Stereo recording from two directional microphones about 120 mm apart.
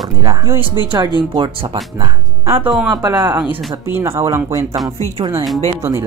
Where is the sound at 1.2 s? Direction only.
40° right (ahead or behind).